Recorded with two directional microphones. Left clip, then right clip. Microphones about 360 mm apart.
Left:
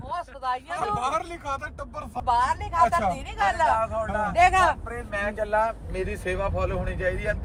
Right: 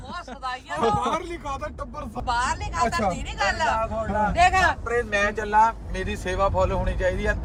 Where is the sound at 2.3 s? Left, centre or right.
Left.